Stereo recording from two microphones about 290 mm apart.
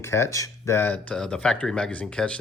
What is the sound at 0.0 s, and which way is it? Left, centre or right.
Speech, centre.